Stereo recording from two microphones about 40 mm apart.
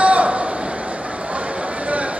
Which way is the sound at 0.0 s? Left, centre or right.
Right.